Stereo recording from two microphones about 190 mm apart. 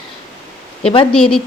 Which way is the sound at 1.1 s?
5° left (ahead or behind).